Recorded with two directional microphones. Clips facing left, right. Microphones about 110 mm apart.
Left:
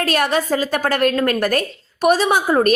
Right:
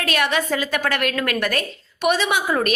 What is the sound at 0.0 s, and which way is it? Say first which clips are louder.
A woman's voice: left 3 dB; 40° left (ahead or behind).